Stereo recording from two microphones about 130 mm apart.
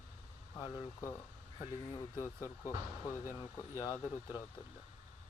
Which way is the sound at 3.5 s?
25° left (ahead or behind).